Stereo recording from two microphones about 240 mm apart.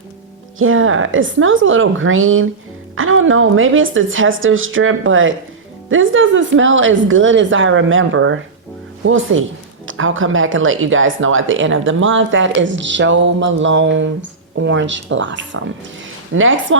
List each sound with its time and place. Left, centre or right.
0.6 s a woman's voice: right